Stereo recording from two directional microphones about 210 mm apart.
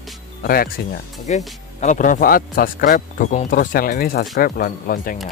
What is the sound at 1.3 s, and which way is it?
Speech, 35° left (ahead or behind).